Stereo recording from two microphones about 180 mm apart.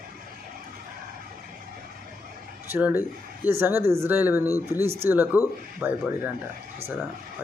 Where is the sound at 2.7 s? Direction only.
10° right (ahead or behind).